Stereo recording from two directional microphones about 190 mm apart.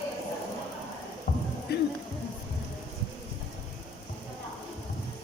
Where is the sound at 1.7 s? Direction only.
55° left (ahead or behind).